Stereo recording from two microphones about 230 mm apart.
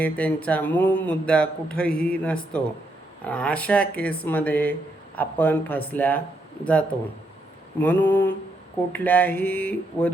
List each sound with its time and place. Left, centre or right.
0.0 s speech: centre
7.8 s speech: centre